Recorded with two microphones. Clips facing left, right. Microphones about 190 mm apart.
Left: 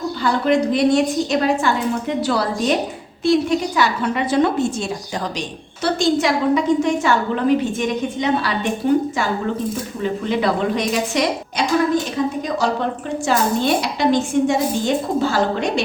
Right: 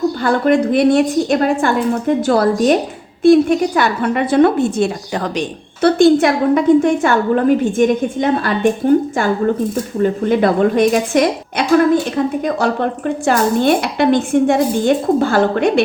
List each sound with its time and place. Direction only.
0.2 s a woman's voice: 55° right (ahead or behind)
10.0 s a woman's voice: 50° right (ahead or behind)